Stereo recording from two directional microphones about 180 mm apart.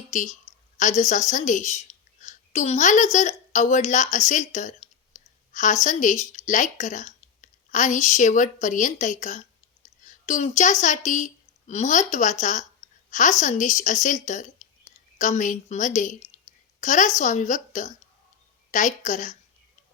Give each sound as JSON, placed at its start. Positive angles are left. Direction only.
{"t": 0.1, "sound": "a woman's voice", "side_deg": 40}
{"t": 13.1, "sound": "a sound", "side_deg": 45}
{"t": 13.4, "sound": "a woman's voice", "side_deg": 45}